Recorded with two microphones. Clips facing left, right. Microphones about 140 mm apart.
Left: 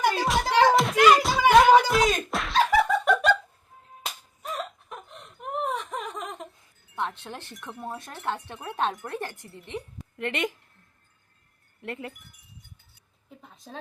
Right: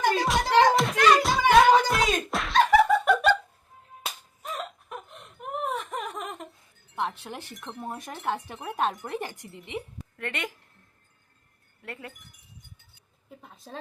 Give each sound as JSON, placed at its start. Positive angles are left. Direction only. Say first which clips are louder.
{"t": 0.3, "sound": "music", "louder": "even", "side_deg": 0}
{"t": 1.2, "sound": "a sound", "louder": "left 1 dB", "side_deg": 0}
{"t": 4.0, "sound": "music", "louder": "left 1 dB", "side_deg": 0}
{"t": 5.0, "sound": "gasp", "louder": "left 1 dB", "side_deg": 0}
{"t": 7.0, "sound": "wind chime", "louder": "right 1 dB", "side_deg": -10}
{"t": 7.9, "sound": "speech", "louder": "right 1 dB", "side_deg": -15}
{"t": 9.1, "sound": "speech", "louder": "right 1 dB", "side_deg": -15}
{"t": 10.2, "sound": "speech", "louder": "left 5 dB", "side_deg": 20}
{"t": 11.8, "sound": "speech", "louder": "left 5 dB", "side_deg": 20}
{"t": 13.7, "sound": "speech", "louder": "even", "side_deg": 0}